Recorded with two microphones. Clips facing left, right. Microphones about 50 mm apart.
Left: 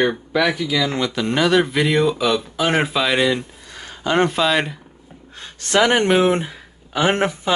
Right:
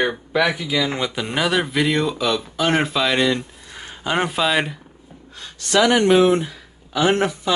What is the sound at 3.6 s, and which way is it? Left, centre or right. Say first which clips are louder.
Speech: left 2 dB; centre.